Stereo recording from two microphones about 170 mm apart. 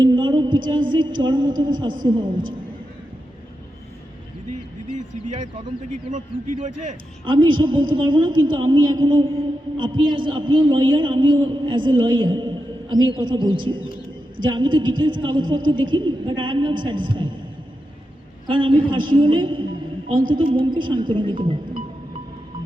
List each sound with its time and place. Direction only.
0.0 s a sound: 25° right (ahead or behind)
4.9 s speech: 45° right (ahead or behind)
7.3 s a man's voice: 30° right (ahead or behind)
18.4 s a man's voice: 30° right (ahead or behind)